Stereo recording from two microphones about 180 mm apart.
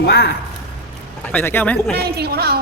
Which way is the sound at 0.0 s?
65° left (ahead or behind).